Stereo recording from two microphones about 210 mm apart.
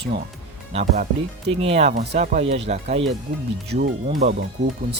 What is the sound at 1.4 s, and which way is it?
Speech, 30° right (ahead or behind).